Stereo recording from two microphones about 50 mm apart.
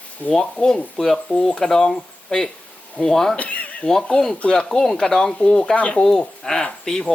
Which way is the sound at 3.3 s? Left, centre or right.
Left.